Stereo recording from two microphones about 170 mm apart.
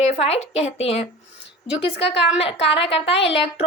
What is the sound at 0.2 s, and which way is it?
A woman's voice, 35° left (ahead or behind).